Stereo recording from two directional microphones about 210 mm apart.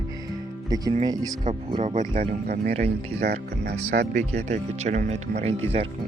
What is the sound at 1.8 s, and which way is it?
Speech, 30° right (ahead or behind).